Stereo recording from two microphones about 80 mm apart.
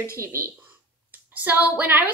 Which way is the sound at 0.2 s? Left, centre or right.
Right.